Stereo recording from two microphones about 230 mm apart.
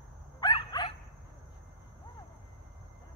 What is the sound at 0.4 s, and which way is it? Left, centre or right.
Dog, centre.